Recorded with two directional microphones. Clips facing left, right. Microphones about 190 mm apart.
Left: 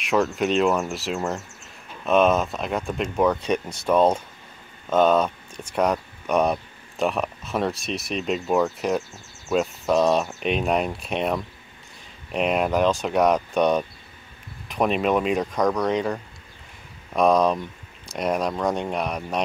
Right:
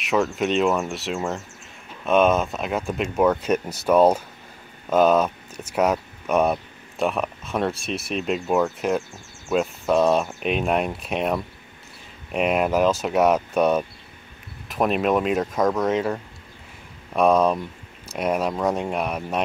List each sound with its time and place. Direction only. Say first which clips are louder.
0.0 s speech: even; centre (ahead or behind)